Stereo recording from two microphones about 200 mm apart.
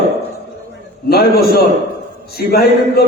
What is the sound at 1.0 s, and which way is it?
Speech, 50° left (ahead or behind).